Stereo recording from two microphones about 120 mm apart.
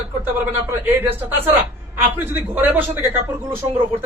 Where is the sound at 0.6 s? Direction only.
15° right (ahead or behind).